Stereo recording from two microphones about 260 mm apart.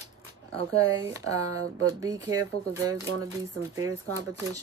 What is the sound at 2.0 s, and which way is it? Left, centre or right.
Speech, centre.